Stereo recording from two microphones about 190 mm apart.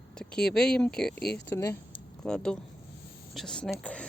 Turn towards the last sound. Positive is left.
turn(degrees=5)  # may be behind; listen again after turning